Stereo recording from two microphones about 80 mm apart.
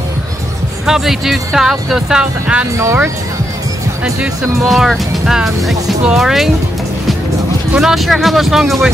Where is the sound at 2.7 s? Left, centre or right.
Right.